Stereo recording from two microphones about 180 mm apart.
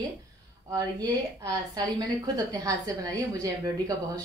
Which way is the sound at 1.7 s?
20° right (ahead or behind).